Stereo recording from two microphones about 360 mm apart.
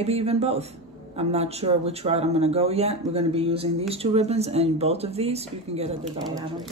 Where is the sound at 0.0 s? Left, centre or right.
Centre.